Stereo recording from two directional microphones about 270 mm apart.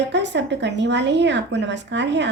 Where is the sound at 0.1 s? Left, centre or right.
Right.